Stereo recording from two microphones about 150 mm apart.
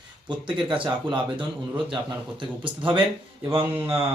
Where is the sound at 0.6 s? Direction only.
30° right (ahead or behind).